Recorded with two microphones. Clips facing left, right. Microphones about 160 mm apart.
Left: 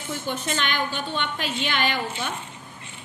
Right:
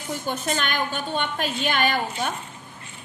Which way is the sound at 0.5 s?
50° right (ahead or behind).